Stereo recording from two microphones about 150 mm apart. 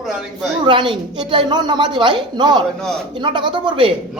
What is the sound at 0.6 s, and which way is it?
A woman's voice, 35° right (ahead or behind).